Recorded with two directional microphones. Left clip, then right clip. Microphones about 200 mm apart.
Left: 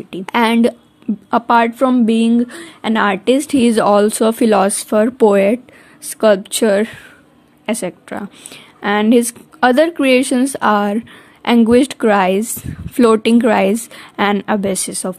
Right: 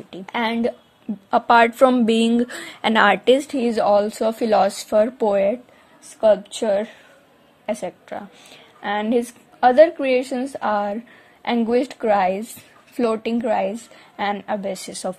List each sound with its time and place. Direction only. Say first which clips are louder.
0.1 s a woman's voice: left 9 dB; 15° left (ahead or behind)
1.3 s a woman's voice: left 2 dB; centre (ahead or behind)
3.5 s a woman's voice: left 5 dB; 20° left (ahead or behind)